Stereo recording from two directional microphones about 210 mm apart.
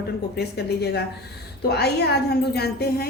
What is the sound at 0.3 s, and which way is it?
A woman's voice, 50° left (ahead or behind).